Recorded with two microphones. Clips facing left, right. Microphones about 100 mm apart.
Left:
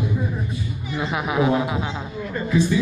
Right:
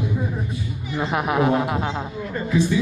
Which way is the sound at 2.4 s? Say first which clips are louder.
Left 1 dB; 35° right (ahead or behind).